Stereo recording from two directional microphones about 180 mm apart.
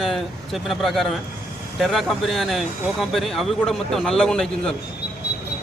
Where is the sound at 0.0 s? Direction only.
Centre (ahead or behind).